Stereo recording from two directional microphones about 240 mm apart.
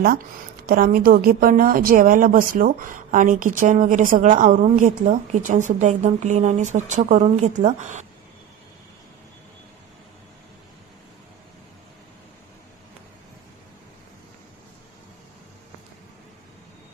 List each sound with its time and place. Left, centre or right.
0.7 s a woman's voice: right